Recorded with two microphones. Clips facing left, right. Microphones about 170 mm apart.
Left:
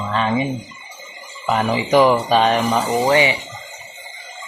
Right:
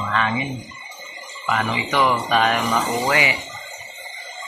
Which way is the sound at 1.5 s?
35° left (ahead or behind).